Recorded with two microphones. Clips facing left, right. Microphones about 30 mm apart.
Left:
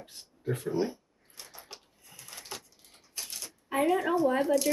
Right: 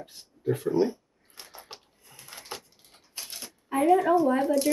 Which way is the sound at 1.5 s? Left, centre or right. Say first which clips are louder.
Right 3 dB; right.